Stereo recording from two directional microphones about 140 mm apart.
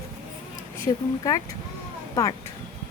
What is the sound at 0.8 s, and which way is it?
Speech, 25° left (ahead or behind).